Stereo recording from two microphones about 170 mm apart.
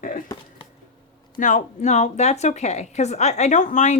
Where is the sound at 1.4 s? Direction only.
45° left (ahead or behind).